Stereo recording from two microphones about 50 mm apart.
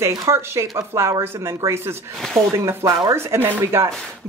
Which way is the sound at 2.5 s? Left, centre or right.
Right.